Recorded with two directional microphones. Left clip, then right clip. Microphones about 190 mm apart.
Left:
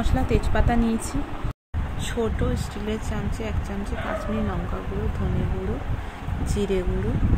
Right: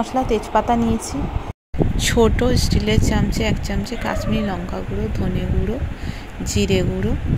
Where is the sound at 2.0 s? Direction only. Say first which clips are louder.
Right 10 dB; 25° right (ahead or behind).